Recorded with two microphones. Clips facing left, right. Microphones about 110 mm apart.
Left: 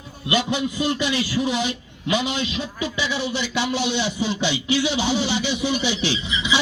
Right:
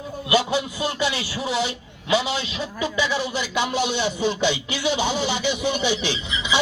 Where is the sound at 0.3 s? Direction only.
35° right (ahead or behind).